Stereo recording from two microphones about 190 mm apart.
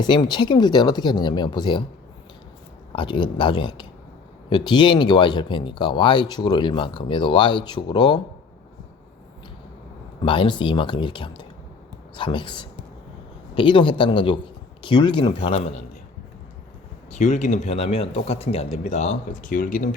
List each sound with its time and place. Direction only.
0.0 s speech: 20° left (ahead or behind)
2.9 s speech: 25° left (ahead or behind)
10.2 s speech: 25° left (ahead or behind)
17.2 s a man's voice: 40° left (ahead or behind)